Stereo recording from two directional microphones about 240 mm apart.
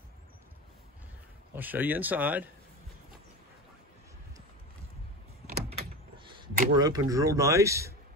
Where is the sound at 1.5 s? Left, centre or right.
Centre.